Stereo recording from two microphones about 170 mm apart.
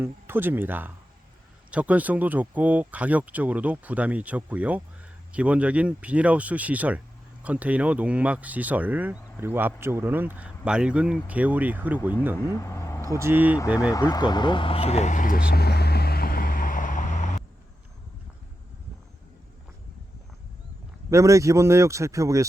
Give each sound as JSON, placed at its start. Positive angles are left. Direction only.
{"t": 0.0, "sound": "speech", "side_deg": -15}
{"t": 12.5, "sound": "vehicle", "side_deg": 15}
{"t": 13.0, "sound": "speech", "side_deg": -15}
{"t": 13.9, "sound": "vehicle", "side_deg": 20}
{"t": 21.1, "sound": "speech", "side_deg": -20}